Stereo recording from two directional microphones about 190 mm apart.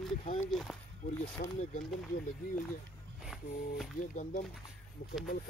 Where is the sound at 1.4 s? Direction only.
40° left (ahead or behind).